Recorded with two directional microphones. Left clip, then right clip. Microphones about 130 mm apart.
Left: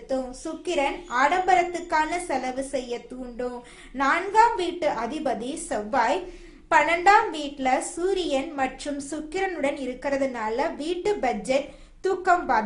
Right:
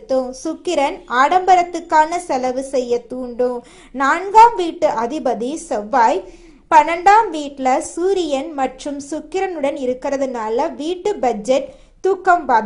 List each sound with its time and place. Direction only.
0.1 s a woman's voice: 55° right (ahead or behind)